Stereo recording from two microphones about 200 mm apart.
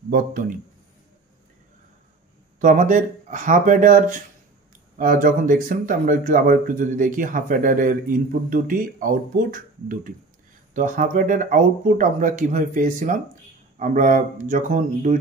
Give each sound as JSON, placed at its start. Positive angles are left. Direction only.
{"t": 0.1, "sound": "speech", "side_deg": -45}
{"t": 2.6, "sound": "speech", "side_deg": -40}